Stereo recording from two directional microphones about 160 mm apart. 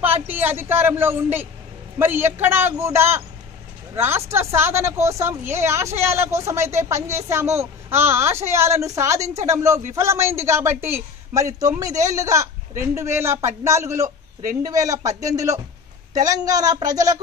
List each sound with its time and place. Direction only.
0.0 s speech: 10° right (ahead or behind)